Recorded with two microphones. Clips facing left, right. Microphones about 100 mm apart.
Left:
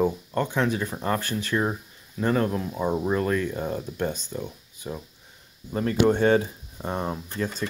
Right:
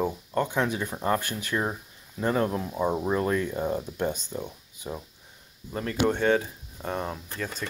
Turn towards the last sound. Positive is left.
turn(degrees=20)  # may be behind; listen again after turning